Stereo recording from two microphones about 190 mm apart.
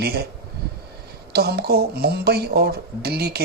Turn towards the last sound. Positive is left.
turn(degrees=-55)  # may be behind; listen again after turning